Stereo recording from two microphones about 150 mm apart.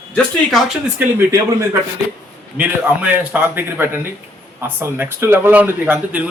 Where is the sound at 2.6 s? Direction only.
10° right (ahead or behind).